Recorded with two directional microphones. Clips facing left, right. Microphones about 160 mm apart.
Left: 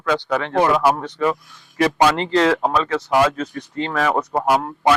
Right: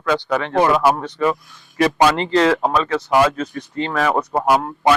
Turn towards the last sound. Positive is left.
turn(degrees=-10)  # may be behind; listen again after turning